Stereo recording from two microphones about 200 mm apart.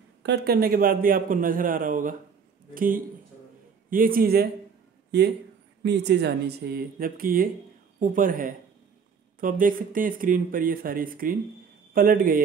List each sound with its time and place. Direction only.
0.2 s a man's voice: 55° right (ahead or behind)